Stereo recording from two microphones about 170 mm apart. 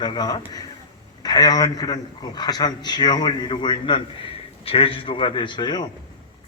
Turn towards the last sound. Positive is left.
turn(degrees=25)  # may be behind; listen again after turning